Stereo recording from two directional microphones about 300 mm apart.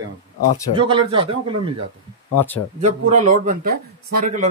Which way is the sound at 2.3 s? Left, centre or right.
Centre.